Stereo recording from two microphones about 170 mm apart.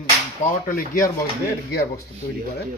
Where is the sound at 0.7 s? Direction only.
55° left (ahead or behind).